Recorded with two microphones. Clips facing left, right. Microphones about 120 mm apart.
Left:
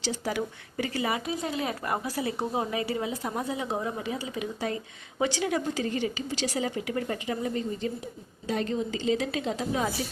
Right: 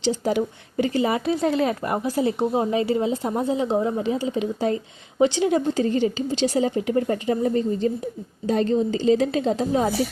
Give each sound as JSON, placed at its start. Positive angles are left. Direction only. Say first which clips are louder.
{"t": 0.0, "sound": "speech", "louder": "right 8 dB", "side_deg": -25}
{"t": 1.2, "sound": "speech", "louder": "right 10 dB", "side_deg": -75}
{"t": 1.6, "sound": "a woman's voice", "louder": "right 7 dB", "side_deg": -25}